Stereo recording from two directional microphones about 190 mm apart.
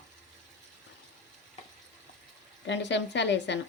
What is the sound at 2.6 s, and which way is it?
Speech, 70° left (ahead or behind).